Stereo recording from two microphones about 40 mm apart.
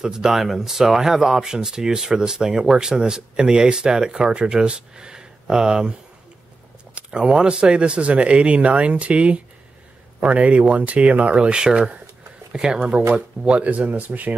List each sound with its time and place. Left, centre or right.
0.0 s speech: centre
7.1 s speech: right
11.5 s speech: right
13.7 s speech: right